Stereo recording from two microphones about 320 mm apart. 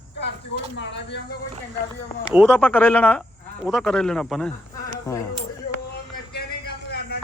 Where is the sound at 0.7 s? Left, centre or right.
Left.